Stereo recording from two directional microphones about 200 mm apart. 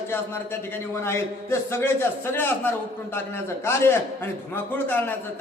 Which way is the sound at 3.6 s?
10° left (ahead or behind).